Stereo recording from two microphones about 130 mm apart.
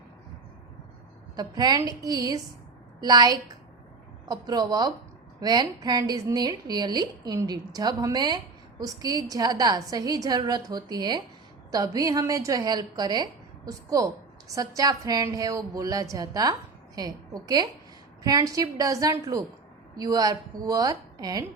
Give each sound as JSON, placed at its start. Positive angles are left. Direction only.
{"t": 1.4, "sound": "a woman's voice", "side_deg": -30}